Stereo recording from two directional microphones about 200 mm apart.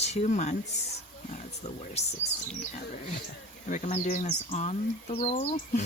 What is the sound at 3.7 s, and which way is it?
Speech, 40° left (ahead or behind).